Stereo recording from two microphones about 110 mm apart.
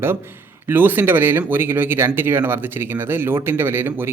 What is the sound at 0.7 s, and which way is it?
Speech, 20° right (ahead or behind).